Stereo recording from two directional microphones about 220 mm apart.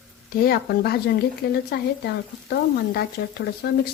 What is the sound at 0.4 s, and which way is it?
Speech, 45° left (ahead or behind).